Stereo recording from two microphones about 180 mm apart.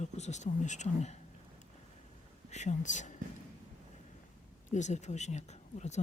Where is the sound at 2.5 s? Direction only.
40° left (ahead or behind).